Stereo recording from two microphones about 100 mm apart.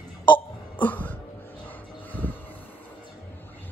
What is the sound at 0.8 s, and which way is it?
Cough, 15° left (ahead or behind).